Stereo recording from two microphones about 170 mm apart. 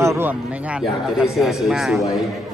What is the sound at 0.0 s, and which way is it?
Speech, 15° right (ahead or behind).